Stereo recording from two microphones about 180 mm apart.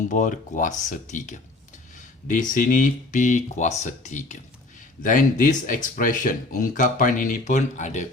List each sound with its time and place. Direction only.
0.1 s speech: 45° left (ahead or behind)